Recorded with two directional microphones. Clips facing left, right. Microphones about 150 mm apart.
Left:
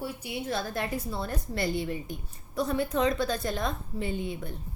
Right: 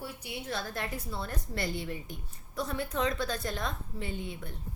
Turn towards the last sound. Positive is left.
turn(degrees=15)  # may be behind; listen again after turning